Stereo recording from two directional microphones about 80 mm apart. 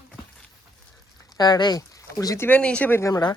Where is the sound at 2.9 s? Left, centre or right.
Left.